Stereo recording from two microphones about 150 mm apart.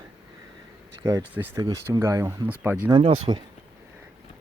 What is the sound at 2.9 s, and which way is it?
Speech, 35° right (ahead or behind).